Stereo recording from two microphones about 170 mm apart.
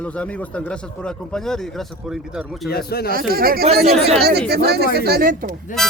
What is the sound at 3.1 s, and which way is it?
Speech, 60° right (ahead or behind).